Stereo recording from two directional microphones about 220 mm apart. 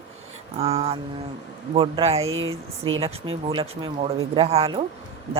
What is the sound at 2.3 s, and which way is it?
Speech, 65° right (ahead or behind).